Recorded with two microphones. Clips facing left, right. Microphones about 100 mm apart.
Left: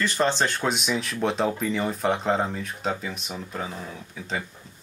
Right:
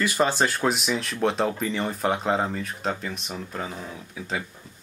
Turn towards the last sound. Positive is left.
turn(degrees=-5)  # may be behind; listen again after turning